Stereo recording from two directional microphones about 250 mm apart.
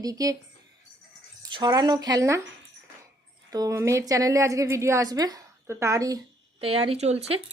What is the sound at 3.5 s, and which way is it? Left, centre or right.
A woman's voice, centre.